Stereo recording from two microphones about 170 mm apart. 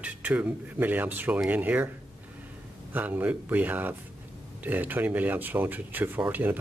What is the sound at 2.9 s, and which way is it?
Speech, 10° right (ahead or behind).